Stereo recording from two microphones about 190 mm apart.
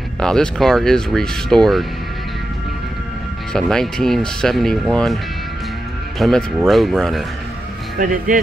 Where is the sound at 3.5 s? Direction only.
Centre (ahead or behind).